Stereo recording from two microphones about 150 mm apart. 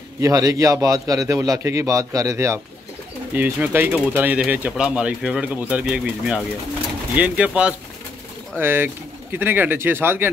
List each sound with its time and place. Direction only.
0.2 s a man's voice: 25° right (ahead or behind)